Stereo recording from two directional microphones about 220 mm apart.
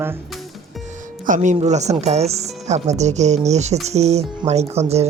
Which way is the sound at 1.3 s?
35° right (ahead or behind).